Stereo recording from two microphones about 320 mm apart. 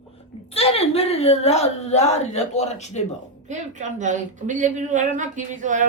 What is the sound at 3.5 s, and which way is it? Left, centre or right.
Speech, right.